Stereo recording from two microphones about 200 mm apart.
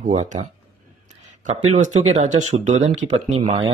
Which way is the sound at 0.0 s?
40° right (ahead or behind).